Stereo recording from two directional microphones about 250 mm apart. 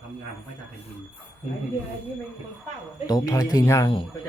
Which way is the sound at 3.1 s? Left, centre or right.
Centre.